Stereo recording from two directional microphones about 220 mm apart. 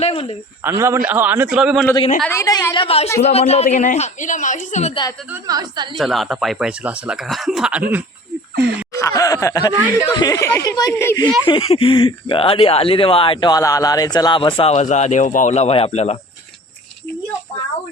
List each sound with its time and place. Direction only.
0.0 s cricket: 25° left (ahead or behind)
0.6 s a man's voice: 10° right (ahead or behind)
2.2 s a woman's voice: 10° left (ahead or behind); by 5.0 s 30° left (ahead or behind)
5.3 s a man's voice: 15° right (ahead or behind)
6.0 s speech: centre (ahead or behind)
8.9 s a woman's voice: 15° left (ahead or behind)
11.4 s speech: 25° left (ahead or behind)